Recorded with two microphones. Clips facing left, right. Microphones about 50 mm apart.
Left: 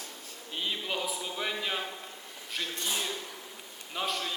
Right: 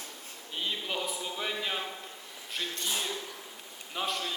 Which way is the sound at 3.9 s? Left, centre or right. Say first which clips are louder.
Even; centre.